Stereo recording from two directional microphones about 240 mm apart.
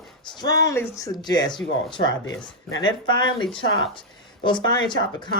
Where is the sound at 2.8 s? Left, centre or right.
Centre.